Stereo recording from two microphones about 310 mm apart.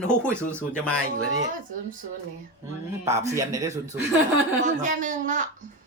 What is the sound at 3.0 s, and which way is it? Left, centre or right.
Speech, centre.